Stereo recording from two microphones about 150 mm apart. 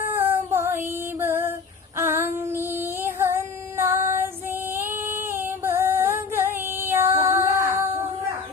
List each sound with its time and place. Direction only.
0.1 s female singing: 15° right (ahead or behind)
0.9 s music: 15° right (ahead or behind)
2.0 s female singing: 15° right (ahead or behind)